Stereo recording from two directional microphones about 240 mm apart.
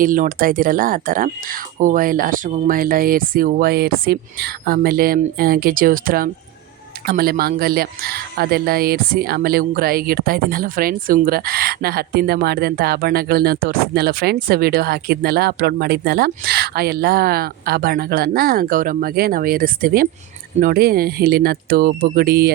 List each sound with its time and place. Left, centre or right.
0.0 s speech: right